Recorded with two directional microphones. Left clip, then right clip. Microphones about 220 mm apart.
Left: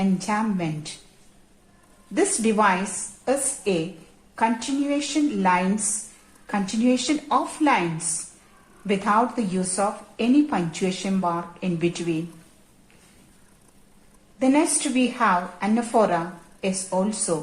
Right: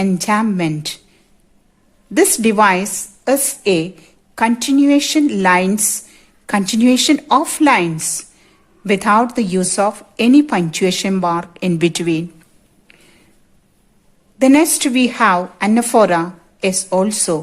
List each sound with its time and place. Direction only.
0.0 s speech: 50° right (ahead or behind)
2.1 s speech: 50° right (ahead or behind)
8.9 s speech: 50° right (ahead or behind)
14.3 s speech: 50° right (ahead or behind)